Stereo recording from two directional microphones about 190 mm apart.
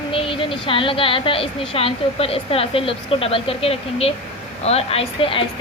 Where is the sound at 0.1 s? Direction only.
30° left (ahead or behind).